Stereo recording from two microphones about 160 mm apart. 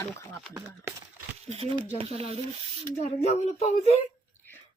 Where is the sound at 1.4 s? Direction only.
40° right (ahead or behind).